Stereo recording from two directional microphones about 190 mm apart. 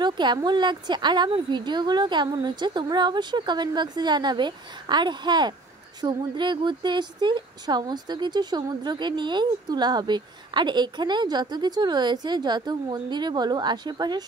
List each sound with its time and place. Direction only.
0.0 s speech: 25° right (ahead or behind)